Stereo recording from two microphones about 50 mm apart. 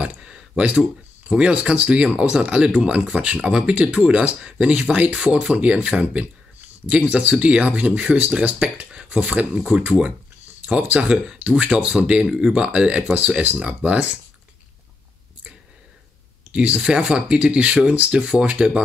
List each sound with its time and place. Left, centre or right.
0.2 s a sound: centre
1.3 s speech: right
9.6 s speech: centre
10.6 s speech: right
16.5 s speech: right